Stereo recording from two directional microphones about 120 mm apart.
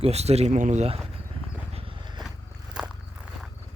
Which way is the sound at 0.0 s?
60° right (ahead or behind).